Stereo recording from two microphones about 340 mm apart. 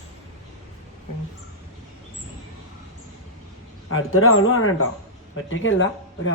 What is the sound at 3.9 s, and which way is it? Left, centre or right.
Speech, left.